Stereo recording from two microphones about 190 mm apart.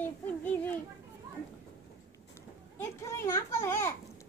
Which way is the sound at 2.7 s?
15° left (ahead or behind).